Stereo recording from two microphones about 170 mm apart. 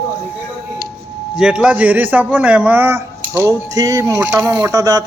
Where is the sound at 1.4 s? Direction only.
5° right (ahead or behind).